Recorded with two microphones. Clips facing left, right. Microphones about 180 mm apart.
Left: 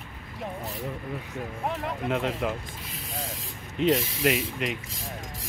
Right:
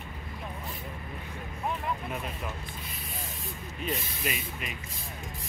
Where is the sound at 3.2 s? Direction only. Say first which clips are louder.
Left 2 dB; 90° left.